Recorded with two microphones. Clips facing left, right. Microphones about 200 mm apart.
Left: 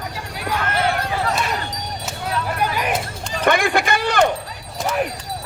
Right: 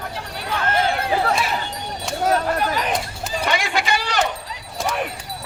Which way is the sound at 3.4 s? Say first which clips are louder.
Left 6 dB; 55° left (ahead or behind).